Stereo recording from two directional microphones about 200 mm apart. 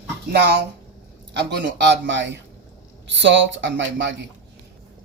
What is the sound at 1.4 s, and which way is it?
Speech, 60° right (ahead or behind).